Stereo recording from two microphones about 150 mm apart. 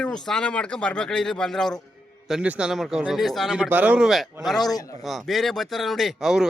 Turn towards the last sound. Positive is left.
turn(degrees=0)  # may be behind; listen again after turning